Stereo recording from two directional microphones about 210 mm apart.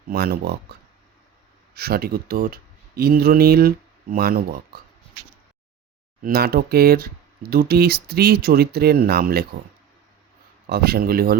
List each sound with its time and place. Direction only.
0.1 s speech: 45° right (ahead or behind)
6.2 s speech: 45° right (ahead or behind)
10.7 s speech: 50° right (ahead or behind)